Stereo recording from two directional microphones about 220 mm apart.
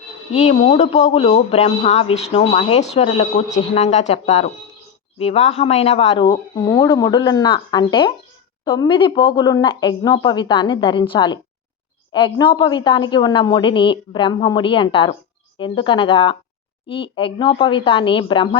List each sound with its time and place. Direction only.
0.3 s a man's voice: 30° left (ahead or behind)